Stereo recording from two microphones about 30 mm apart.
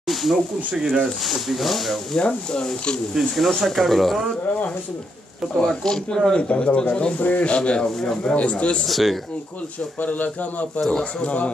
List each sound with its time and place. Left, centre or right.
0.1 s a sound: centre
1.3 s speech: centre
2.1 s speech: left
3.3 s speech: centre
5.6 s speech: left
6.3 s speech: left
7.2 s speech: left
7.4 s speech: left
8.8 s speech: centre
10.0 s speech: left
10.9 s speech: left
11.2 s speech: left